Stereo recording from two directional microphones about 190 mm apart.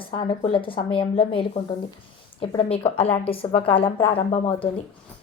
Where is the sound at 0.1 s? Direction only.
25° left (ahead or behind).